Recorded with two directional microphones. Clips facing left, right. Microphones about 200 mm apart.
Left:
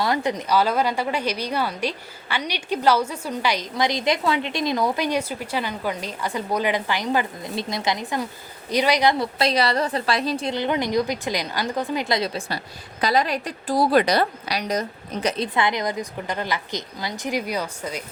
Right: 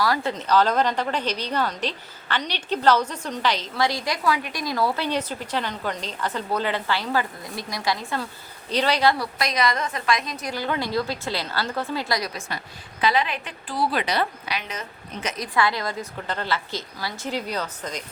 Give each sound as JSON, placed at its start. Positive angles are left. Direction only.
{"t": 0.0, "sound": "a woman's voice", "side_deg": 20}
{"t": 15.5, "sound": "a woman's voice", "side_deg": 20}